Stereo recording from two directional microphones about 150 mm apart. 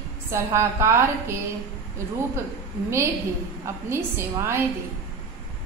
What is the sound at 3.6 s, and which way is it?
A woman's voice, 15° right (ahead or behind).